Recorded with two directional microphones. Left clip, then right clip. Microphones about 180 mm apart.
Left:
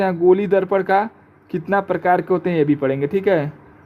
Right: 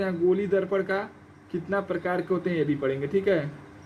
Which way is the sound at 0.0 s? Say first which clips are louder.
Left 9 dB; 60° left (ahead or behind).